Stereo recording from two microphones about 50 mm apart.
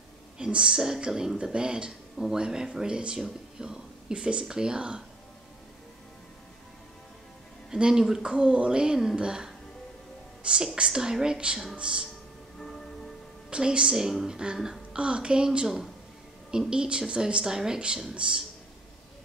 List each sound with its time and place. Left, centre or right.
0.4 s speech: centre
7.7 s speech: centre
12.5 s music: centre
13.5 s a woman's voice: centre